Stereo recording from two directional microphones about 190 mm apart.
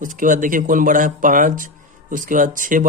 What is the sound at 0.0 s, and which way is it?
Speech, 45° right (ahead or behind).